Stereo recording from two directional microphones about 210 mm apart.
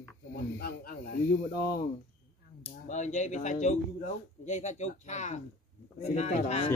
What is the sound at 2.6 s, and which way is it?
Speech, 35° left (ahead or behind).